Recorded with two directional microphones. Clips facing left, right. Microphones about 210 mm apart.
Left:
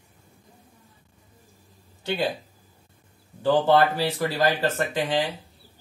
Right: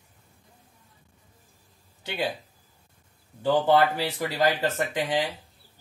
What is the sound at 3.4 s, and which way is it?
Speech, 15° right (ahead or behind).